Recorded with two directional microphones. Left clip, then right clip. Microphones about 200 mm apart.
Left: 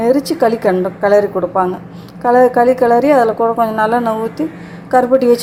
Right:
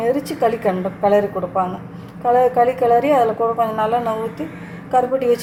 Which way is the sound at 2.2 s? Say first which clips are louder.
Left 5 dB; 35° left (ahead or behind).